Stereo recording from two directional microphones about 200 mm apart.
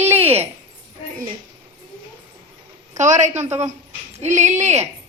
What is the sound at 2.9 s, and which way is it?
Speech, 35° right (ahead or behind).